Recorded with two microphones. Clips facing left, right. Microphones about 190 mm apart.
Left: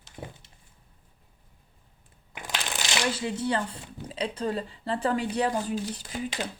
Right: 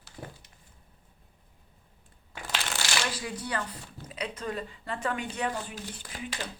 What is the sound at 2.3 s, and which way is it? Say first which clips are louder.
Speech: left 1 dB; 15° left (ahead or behind).